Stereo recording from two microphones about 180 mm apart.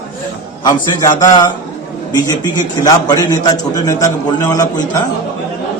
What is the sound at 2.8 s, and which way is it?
A man's voice, 20° left (ahead or behind).